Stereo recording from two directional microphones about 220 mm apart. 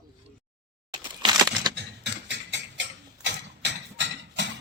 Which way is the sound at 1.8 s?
50° right (ahead or behind).